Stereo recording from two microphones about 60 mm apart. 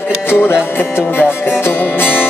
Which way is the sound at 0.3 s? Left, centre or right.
Left.